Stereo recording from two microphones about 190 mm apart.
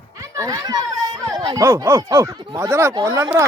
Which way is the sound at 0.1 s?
15° right (ahead or behind).